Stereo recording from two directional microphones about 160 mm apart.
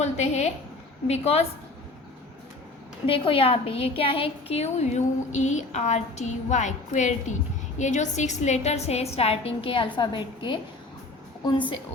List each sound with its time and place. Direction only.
0.0 s a woman's voice: 45° left (ahead or behind)
3.1 s a woman's voice: 35° left (ahead or behind)